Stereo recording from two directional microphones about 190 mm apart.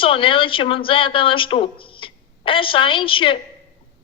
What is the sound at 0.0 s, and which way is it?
A woman's voice, 25° left (ahead or behind).